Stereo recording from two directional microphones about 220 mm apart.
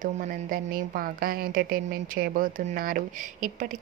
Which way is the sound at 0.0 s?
40° right (ahead or behind).